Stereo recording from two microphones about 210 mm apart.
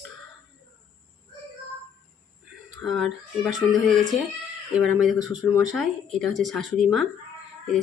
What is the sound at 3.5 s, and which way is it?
Speech, centre (ahead or behind).